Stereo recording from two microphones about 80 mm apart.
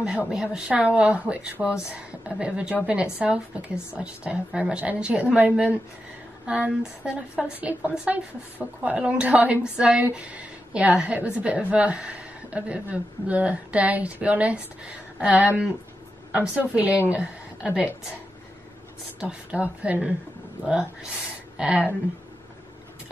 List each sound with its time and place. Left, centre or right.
0.0 s a woman's voice: centre
19.1 s speech: centre